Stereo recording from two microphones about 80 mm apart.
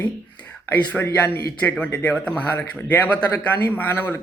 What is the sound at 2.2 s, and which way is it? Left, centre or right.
Speech, centre.